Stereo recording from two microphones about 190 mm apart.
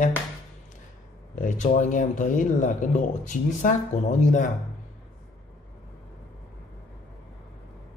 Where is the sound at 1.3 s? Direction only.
40° left (ahead or behind).